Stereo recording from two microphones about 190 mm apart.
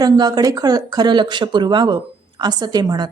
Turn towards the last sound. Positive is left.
turn(degrees=-20)  # may be behind; listen again after turning